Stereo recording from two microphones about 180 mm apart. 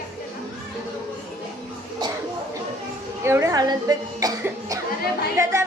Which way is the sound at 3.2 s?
15° right (ahead or behind).